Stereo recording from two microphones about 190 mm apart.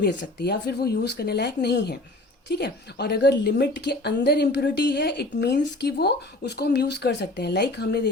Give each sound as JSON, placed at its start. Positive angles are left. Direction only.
{"t": 0.0, "sound": "a woman's voice", "side_deg": 65}